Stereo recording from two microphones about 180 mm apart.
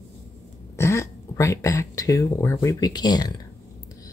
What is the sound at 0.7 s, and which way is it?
Speech, 15° left (ahead or behind).